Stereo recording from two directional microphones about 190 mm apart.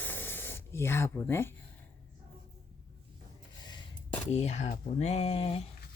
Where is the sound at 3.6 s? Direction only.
25° left (ahead or behind).